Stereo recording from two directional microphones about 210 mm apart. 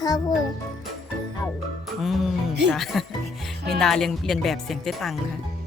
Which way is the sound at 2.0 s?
Centre (ahead or behind).